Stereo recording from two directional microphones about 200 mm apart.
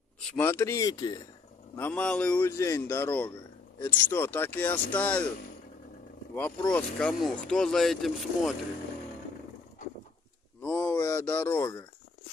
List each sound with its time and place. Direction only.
0.4 s speech: 15° left (ahead or behind)
1.8 s speech: 5° left (ahead or behind)
6.3 s speech: 5° left (ahead or behind)
10.6 s a sound: 10° left (ahead or behind)